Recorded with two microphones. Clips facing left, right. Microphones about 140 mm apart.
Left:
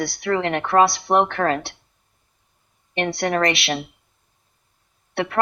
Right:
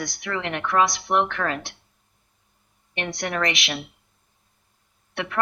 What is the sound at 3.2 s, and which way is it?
Speech, 40° left (ahead or behind).